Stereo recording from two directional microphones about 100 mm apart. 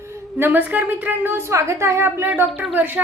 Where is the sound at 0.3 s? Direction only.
20° right (ahead or behind).